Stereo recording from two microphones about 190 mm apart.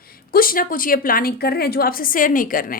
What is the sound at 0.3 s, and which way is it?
A woman's voice, 50° left (ahead or behind).